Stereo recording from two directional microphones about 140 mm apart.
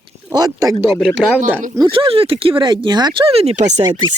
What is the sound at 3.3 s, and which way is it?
Speech, 45° right (ahead or behind).